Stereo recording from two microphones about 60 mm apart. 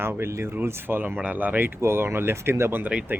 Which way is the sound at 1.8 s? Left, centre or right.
Right.